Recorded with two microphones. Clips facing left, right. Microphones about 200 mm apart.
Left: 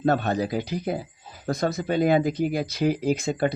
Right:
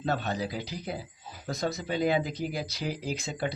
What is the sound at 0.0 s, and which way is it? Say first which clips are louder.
Speech: left 8 dB; 55° left (ahead or behind).